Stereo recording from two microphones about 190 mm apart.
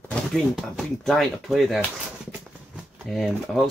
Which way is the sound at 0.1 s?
Centre (ahead or behind).